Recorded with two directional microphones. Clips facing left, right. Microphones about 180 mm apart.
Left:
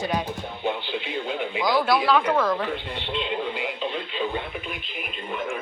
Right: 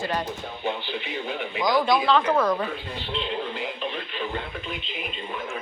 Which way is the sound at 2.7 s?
20° left (ahead or behind).